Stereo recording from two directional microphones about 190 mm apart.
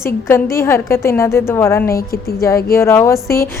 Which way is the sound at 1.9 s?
50° left (ahead or behind).